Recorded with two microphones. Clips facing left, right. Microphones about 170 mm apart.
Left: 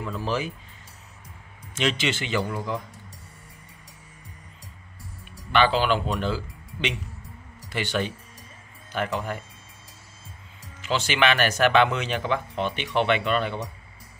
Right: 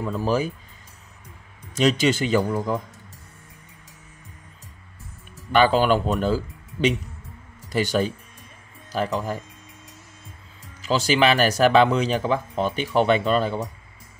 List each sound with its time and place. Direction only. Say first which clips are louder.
0.0 s speech: right 5 dB; 40° right (ahead or behind)
1.8 s speech: right 6 dB; 40° right (ahead or behind)
5.5 s speech: right 4 dB; 45° right (ahead or behind)
10.8 s speech: right 4 dB; 35° right (ahead or behind)